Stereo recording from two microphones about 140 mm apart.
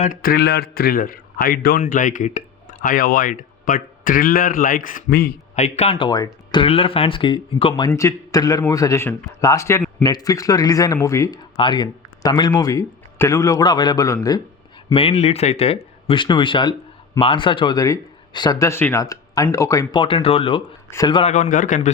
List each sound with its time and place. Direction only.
0.0 s a man's voice: 80° left
5.5 s speech: 50° left (ahead or behind)
6.1 s speech: 30° left (ahead or behind)
11.5 s speech: 35° left (ahead or behind)
14.9 s speech: 45° left (ahead or behind); by 18.7 s 30° left (ahead or behind)
18.7 s speech: 15° left (ahead or behind)
20.0 s speech: 40° left (ahead or behind)
21.2 s a man's voice: 55° left (ahead or behind)